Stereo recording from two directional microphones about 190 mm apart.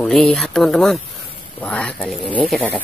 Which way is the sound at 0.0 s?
Centre (ahead or behind).